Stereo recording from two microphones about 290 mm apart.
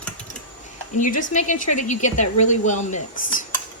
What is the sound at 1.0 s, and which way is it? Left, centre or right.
Speech, left.